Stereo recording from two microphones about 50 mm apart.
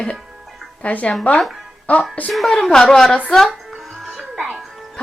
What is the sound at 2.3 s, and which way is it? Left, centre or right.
Speech, centre.